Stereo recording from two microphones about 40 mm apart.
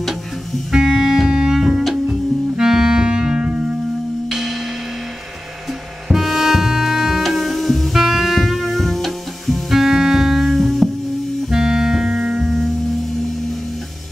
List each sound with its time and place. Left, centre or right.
0.7 s music: centre
1.6 s music: centre
2.0 s music: centre
4.3 s music: centre
6.0 s music: centre
11.5 s music: centre